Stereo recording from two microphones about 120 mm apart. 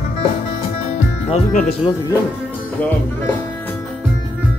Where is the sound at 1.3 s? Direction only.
90° left.